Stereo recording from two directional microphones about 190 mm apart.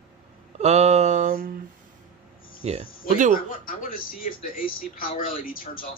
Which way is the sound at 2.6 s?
35° right (ahead or behind).